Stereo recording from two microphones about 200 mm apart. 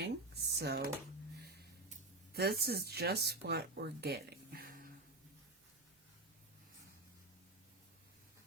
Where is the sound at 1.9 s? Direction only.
50° right (ahead or behind).